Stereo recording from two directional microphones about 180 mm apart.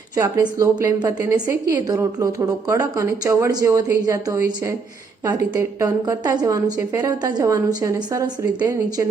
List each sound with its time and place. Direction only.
0.2 s a woman's voice: 15° right (ahead or behind)